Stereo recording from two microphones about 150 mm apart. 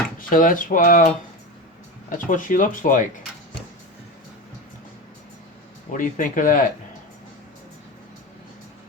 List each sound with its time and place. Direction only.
0.2 s speech: 65° left (ahead or behind)
5.9 s speech: 60° left (ahead or behind)